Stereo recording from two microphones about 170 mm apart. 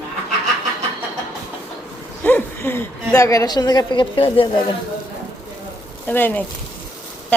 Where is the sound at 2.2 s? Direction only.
10° left (ahead or behind); by 4.5 s 30° left (ahead or behind).